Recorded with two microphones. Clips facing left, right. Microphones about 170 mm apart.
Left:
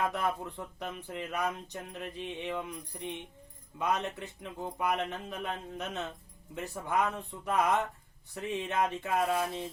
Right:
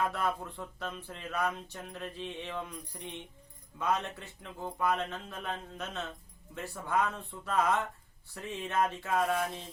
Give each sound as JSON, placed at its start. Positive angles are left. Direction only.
{"t": 0.1, "sound": "speech", "side_deg": 20}